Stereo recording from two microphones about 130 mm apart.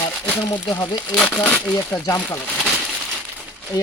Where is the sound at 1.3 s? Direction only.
15° left (ahead or behind).